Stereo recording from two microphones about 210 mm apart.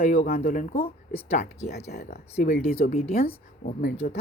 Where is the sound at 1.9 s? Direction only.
50° left (ahead or behind); by 3.2 s 30° left (ahead or behind).